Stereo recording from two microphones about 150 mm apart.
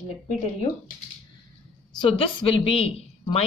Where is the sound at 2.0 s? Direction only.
35° left (ahead or behind).